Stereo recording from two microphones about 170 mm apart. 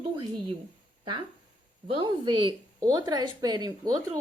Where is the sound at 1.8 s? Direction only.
30° right (ahead or behind).